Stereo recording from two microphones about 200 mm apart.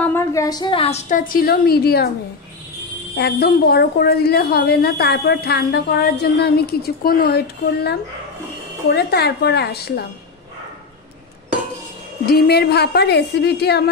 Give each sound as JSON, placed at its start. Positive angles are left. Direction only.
{"t": 0.0, "sound": "a woman's voice", "side_deg": 15}
{"t": 3.2, "sound": "a woman's voice", "side_deg": 55}
{"t": 12.3, "sound": "a woman's voice", "side_deg": 50}